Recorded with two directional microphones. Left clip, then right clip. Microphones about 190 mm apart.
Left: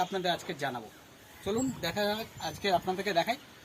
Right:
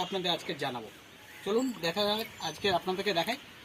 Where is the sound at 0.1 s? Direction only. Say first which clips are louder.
Even; 10° left (ahead or behind).